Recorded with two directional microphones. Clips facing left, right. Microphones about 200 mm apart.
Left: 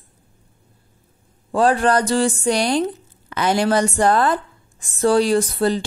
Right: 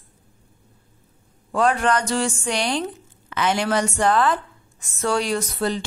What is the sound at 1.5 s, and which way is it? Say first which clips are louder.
A woman's voice: left 3 dB; 35° left (ahead or behind).